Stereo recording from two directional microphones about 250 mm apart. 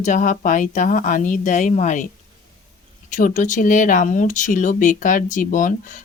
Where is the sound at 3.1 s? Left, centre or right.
Left.